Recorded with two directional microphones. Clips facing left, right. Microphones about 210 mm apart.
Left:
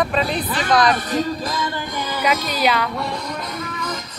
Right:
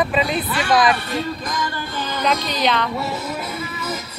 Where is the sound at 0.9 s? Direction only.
40° left (ahead or behind).